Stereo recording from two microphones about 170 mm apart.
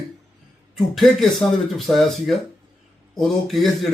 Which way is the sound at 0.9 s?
Centre (ahead or behind).